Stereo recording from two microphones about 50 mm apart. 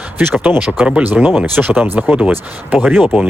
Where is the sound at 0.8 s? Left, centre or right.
Right.